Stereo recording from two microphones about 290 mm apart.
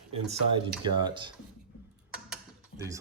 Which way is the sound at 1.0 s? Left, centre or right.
Centre.